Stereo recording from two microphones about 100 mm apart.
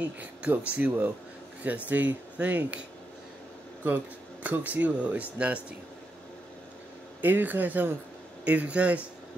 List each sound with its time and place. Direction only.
0.0 s speech: 15° right (ahead or behind)
3.8 s speech: 15° right (ahead or behind)
7.2 s speech: 15° right (ahead or behind)